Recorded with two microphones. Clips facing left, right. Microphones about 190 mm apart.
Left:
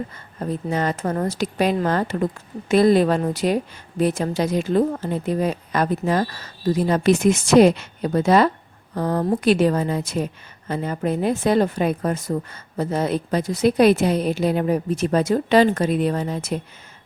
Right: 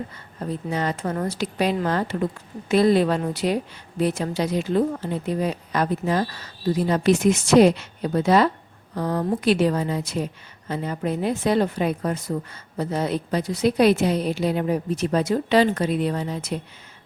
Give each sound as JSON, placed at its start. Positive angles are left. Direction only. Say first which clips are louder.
{"t": 0.3, "sound": "speech", "louder": "left 3 dB", "side_deg": 50}